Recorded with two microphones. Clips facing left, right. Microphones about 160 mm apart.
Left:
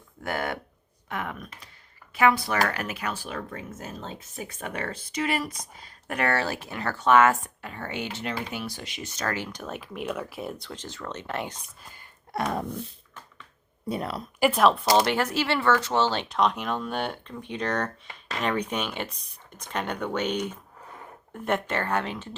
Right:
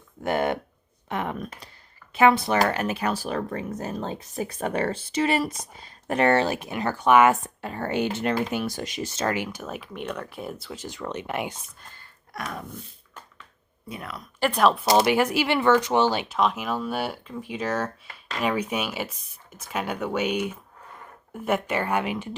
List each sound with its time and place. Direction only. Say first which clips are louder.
0.2 s speech: right 6 dB; 20° right (ahead or behind)
1.4 s speech: right 7 dB; 40° right (ahead or behind)
2.1 s speech: right 3 dB; 25° right (ahead or behind)
3.9 s speech: right 7 dB; 55° right (ahead or behind)
4.2 s speech: right 8 dB; 35° right (ahead or behind); by 7.5 s 15° right (ahead or behind)
7.6 s speech: right 7 dB; 40° right (ahead or behind)
9.3 s speech: right 3 dB; 10° right (ahead or behind)
11.8 s speech: even; 10° left (ahead or behind)
12.3 s dog: left 6 dB; 35° left (ahead or behind)
13.8 s speech: left 7 dB; 35° left (ahead or behind)
14.3 s speech: even; 5° left (ahead or behind); by 22.4 s 10° right (ahead or behind)